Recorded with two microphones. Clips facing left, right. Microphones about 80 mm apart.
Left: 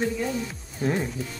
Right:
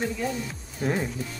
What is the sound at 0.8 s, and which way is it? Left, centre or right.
Speech, centre.